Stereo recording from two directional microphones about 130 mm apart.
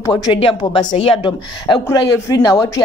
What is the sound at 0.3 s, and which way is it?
Speech, 45° left (ahead or behind).